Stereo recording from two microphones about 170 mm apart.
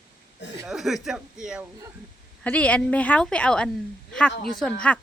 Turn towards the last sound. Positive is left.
turn(degrees=10)  # may be behind; listen again after turning